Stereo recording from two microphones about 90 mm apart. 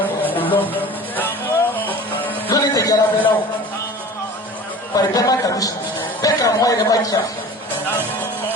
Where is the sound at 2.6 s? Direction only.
40° left (ahead or behind).